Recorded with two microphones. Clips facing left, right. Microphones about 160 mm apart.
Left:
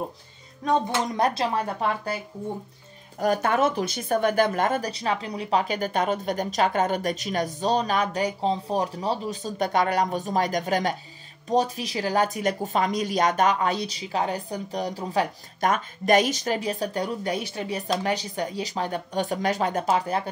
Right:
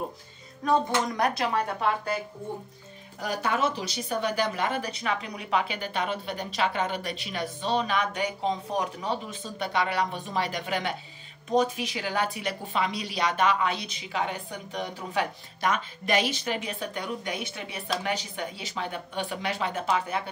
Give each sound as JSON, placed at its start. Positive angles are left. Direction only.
{"t": 1.1, "sound": "speech", "side_deg": 30}
{"t": 3.2, "sound": "speech", "side_deg": 50}